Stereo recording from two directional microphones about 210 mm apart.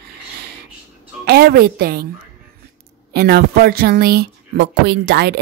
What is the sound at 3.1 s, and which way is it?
Speech, 50° right (ahead or behind).